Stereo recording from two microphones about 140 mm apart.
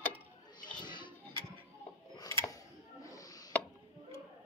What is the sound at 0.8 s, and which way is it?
Music, 35° left (ahead or behind).